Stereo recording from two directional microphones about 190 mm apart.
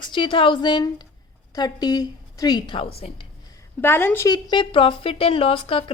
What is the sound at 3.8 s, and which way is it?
A woman's voice, 10° left (ahead or behind).